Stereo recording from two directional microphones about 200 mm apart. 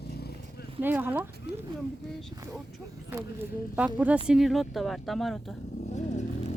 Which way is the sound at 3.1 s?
10° right (ahead or behind).